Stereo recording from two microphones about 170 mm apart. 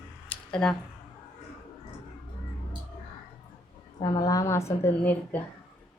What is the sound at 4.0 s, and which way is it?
A woman's voice, 25° left (ahead or behind).